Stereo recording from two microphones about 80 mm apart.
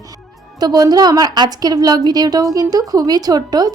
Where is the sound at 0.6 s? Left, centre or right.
Right.